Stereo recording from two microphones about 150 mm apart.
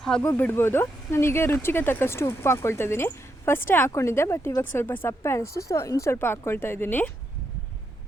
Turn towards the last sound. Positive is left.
turn(degrees=15)  # may be behind; listen again after turning